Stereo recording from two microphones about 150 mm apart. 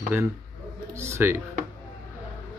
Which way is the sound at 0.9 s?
15° right (ahead or behind).